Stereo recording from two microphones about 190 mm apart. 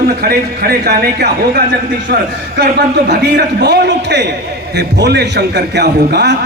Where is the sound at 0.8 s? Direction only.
55° right (ahead or behind).